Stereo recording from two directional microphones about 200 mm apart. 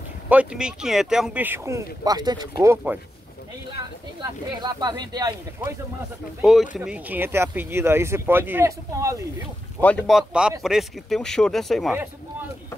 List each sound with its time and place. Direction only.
0.3 s speech: 5° right (ahead or behind)
4.2 s speech: 20° right (ahead or behind)
6.4 s speech: centre (ahead or behind); by 9.2 s 15° right (ahead or behind)
9.8 s speech: 5° left (ahead or behind)